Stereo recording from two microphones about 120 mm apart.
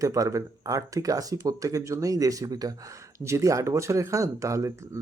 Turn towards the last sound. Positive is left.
turn(degrees=-25)  # may be behind; listen again after turning